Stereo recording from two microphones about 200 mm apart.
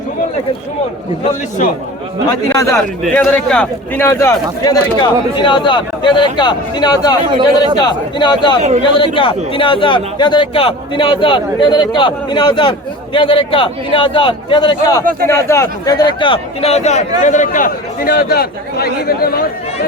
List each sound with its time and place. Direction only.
2.5 s speech: 15° left (ahead or behind)
3.0 s a man's voice: 5° left (ahead or behind); by 7.2 s 20° left (ahead or behind)
7.3 s speech: 25° right (ahead or behind)
7.8 s a man's voice: 20° left (ahead or behind); by 19.5 s 50° left (ahead or behind)